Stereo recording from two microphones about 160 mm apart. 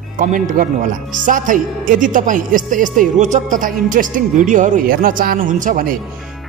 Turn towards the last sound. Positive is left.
turn(degrees=-55)  # may be behind; listen again after turning